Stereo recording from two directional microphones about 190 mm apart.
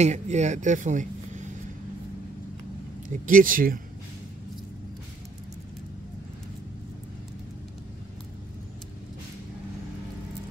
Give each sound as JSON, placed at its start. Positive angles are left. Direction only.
{"t": 0.0, "sound": "speech", "side_deg": -35}
{"t": 3.3, "sound": "speech", "side_deg": -45}